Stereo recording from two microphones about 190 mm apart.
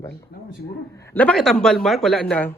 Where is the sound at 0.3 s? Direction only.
60° left (ahead or behind).